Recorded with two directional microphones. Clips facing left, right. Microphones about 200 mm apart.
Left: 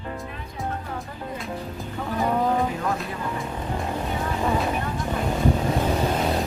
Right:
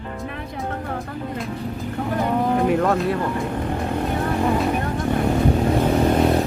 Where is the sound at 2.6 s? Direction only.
70° right (ahead or behind).